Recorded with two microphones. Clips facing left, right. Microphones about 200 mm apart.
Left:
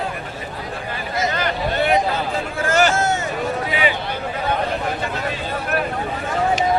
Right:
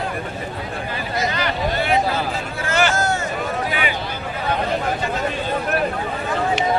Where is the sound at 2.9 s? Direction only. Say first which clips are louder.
Left 1 dB; 25° left (ahead or behind).